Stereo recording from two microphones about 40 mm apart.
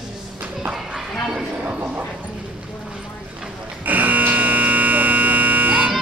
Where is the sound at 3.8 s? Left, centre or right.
Right.